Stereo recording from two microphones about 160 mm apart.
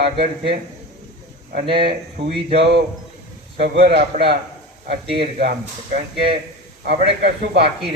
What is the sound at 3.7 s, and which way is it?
Speech, 40° right (ahead or behind).